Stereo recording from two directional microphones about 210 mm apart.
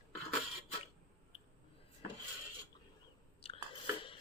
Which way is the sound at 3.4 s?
25° left (ahead or behind).